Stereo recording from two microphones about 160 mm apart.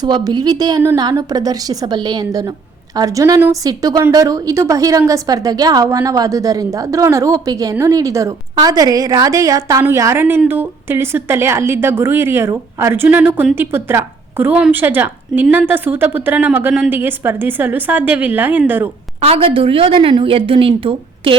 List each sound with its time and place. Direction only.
0.0 s a woman's voice: 25° right (ahead or behind)
19.2 s a woman's voice: 35° right (ahead or behind)